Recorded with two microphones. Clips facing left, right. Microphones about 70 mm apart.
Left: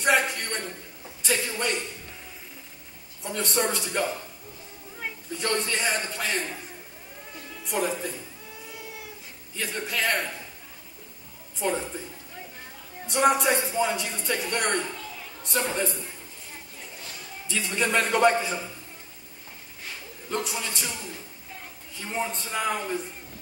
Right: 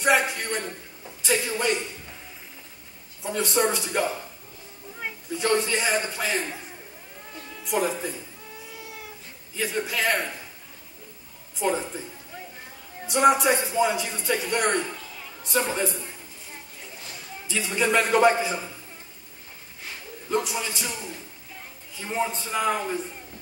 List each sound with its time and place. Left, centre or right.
0.0 s speech: centre
3.3 s speech: centre
9.6 s speech: centre
11.5 s speech: centre
13.0 s speech: centre
17.5 s speech: centre
20.2 s speech: centre